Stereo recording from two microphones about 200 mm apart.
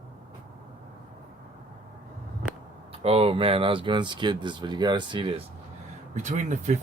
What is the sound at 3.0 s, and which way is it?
Speech, 30° right (ahead or behind).